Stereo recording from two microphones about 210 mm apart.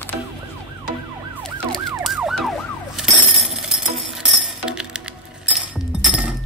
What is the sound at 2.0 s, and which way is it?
Emergency vehicle, centre (ahead or behind).